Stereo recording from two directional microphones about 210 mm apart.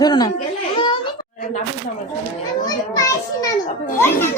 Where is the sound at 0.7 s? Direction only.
25° left (ahead or behind).